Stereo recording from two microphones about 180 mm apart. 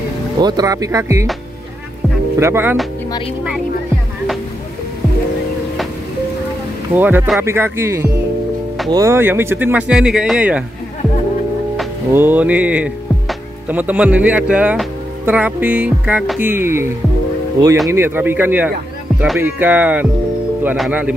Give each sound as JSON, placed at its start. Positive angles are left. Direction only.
{"t": 0.4, "sound": "speech", "side_deg": -20}
{"t": 2.4, "sound": "speech", "side_deg": -10}
{"t": 7.0, "sound": "speech", "side_deg": -10}
{"t": 12.1, "sound": "speech", "side_deg": -10}
{"t": 17.8, "sound": "speech", "side_deg": -15}